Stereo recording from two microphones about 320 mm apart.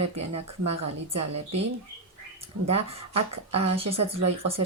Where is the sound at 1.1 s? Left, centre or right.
Right.